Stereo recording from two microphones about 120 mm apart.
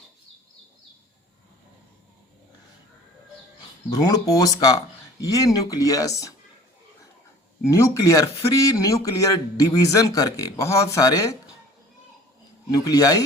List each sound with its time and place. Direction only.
3.8 s a man's voice: 30° left (ahead or behind)
7.7 s a man's voice: 25° left (ahead or behind)
12.7 s speech: 30° left (ahead or behind)